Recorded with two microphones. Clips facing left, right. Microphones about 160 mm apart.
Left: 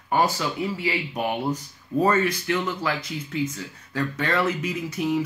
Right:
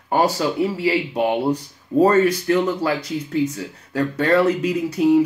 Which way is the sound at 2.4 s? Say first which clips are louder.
Right 7 dB; 40° right (ahead or behind).